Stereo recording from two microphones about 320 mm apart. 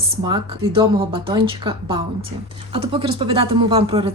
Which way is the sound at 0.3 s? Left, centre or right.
Centre.